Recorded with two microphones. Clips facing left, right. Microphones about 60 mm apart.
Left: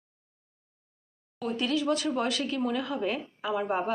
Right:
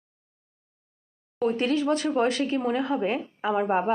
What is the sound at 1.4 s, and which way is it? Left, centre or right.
Speech, right.